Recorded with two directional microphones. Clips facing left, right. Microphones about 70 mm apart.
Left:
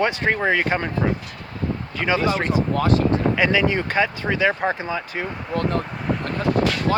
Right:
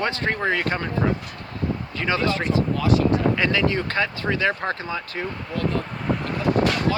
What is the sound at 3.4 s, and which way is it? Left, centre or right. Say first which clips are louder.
Speech: left 2 dB; centre.